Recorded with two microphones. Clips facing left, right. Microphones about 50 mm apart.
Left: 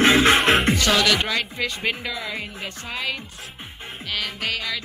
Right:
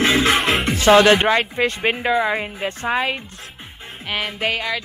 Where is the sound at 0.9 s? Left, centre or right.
Right.